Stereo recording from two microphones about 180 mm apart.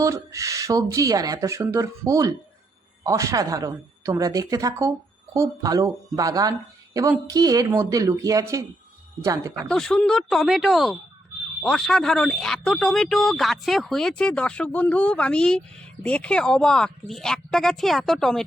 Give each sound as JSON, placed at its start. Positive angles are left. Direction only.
{"t": 0.0, "sound": "speech", "side_deg": -15}
{"t": 9.6, "sound": "speech", "side_deg": 5}